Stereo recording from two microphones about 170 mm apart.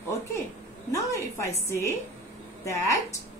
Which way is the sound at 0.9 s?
15° left (ahead or behind).